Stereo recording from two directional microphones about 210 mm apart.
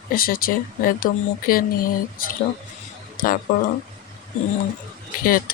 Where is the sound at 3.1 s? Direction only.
40° left (ahead or behind).